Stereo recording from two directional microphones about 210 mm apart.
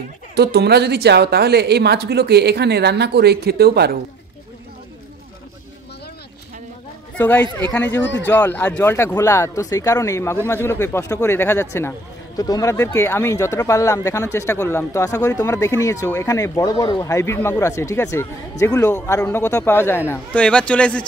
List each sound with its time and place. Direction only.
0.4 s a woman's voice: 50° right (ahead or behind)
7.2 s speech: 5° left (ahead or behind)